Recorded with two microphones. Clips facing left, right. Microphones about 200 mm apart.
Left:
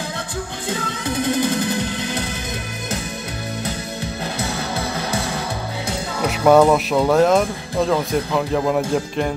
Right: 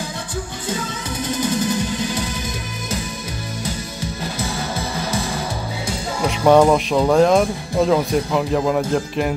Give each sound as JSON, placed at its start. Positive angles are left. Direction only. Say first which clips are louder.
{"t": 1.0, "sound": "music", "louder": "left 5 dB", "side_deg": 55}
{"t": 6.2, "sound": "music", "louder": "even", "side_deg": 5}
{"t": 6.7, "sound": "speech", "louder": "even", "side_deg": 0}